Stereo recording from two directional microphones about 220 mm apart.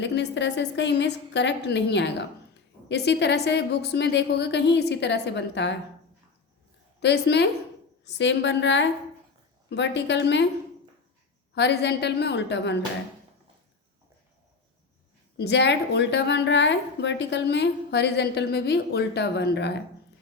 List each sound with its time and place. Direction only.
0.0 s a woman's voice: 55° left (ahead or behind)
7.0 s a woman's voice: 50° left (ahead or behind)
11.5 s a woman's voice: 50° left (ahead or behind)
15.4 s a woman's voice: 50° left (ahead or behind)